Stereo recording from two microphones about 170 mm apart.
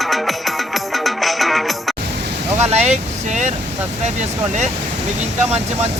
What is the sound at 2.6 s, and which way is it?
Speech, 40° right (ahead or behind).